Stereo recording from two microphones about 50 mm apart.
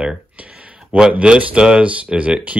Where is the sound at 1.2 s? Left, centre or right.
Right.